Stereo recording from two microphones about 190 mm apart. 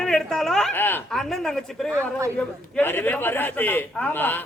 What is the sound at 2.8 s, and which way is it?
A man's voice, 10° left (ahead or behind).